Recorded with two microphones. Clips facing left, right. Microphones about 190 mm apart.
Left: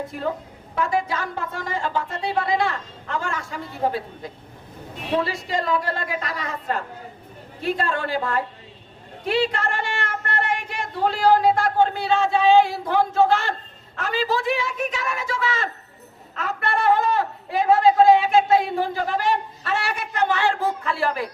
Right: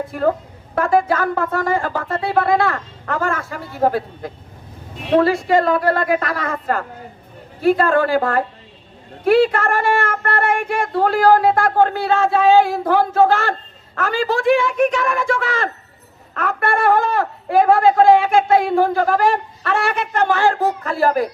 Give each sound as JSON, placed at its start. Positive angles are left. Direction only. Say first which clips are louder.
{"t": 0.1, "sound": "a man's voice", "louder": "right 8 dB", "side_deg": -55}